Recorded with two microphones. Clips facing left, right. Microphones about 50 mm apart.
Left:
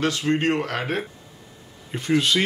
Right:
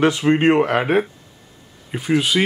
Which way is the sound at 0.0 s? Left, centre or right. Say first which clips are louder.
Right 7 dB; right.